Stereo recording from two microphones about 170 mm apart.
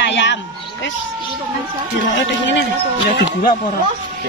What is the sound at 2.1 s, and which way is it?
Speech, 90° left.